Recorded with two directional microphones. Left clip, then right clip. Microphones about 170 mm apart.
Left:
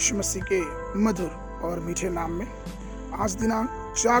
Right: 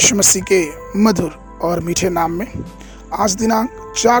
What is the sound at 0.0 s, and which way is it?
Speech, 65° right (ahead or behind).